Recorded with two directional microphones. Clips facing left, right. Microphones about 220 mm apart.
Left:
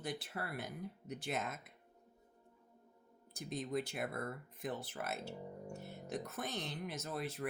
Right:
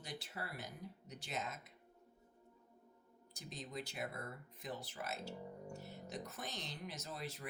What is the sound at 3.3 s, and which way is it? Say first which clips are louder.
Speech: left 8 dB; 55° left (ahead or behind).